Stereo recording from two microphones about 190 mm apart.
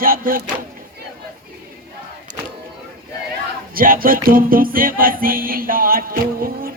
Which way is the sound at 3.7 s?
50° right (ahead or behind).